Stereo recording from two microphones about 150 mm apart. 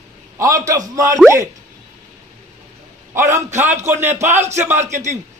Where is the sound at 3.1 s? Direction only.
20° right (ahead or behind).